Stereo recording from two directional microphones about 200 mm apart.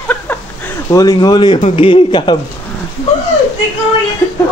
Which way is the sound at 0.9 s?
15° left (ahead or behind).